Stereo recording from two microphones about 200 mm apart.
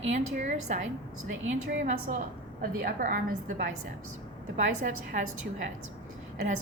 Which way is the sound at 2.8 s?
45° right (ahead or behind).